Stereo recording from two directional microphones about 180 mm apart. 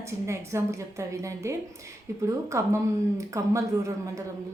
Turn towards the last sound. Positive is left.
turn(degrees=-15)  # may be behind; listen again after turning